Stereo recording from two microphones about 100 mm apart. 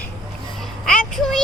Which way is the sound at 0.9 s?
5° left (ahead or behind).